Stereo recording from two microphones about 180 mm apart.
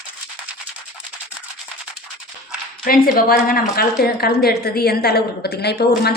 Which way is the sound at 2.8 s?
55° left (ahead or behind).